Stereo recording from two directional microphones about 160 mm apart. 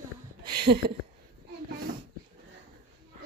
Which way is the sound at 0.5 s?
75° right (ahead or behind).